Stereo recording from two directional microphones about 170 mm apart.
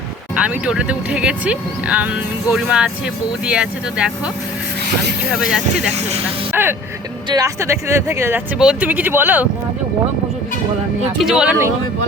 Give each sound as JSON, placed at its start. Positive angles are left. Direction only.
{"t": 0.3, "sound": "speech", "side_deg": -5}
{"t": 5.3, "sound": "speech", "side_deg": -5}
{"t": 11.2, "sound": "speech", "side_deg": -5}